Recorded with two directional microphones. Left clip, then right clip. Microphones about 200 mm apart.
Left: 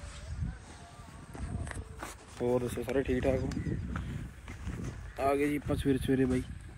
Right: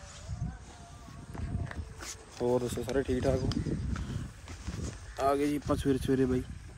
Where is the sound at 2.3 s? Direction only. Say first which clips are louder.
Right 1 dB; 20° right (ahead or behind).